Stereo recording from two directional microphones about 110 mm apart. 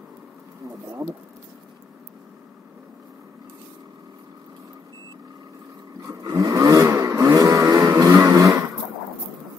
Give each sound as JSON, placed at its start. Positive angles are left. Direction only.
{"t": 6.0, "sound": "vehicle", "side_deg": -30}